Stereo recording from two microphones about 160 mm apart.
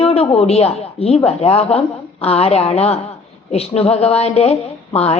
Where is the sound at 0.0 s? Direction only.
35° left (ahead or behind).